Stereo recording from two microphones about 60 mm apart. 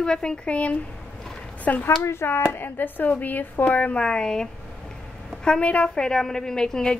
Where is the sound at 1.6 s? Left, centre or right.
Left.